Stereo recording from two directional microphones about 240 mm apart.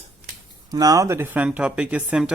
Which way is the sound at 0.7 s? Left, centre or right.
Centre.